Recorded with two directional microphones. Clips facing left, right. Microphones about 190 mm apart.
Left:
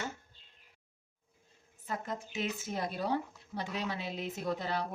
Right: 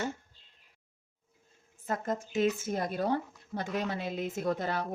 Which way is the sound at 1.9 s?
45° right (ahead or behind).